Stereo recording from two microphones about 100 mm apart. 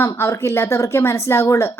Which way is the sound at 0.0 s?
30° left (ahead or behind).